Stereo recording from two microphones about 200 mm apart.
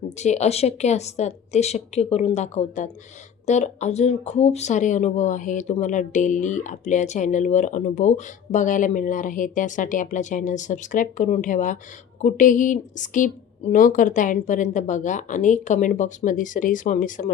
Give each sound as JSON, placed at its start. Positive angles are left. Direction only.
{"t": 0.2, "sound": "speech", "side_deg": 35}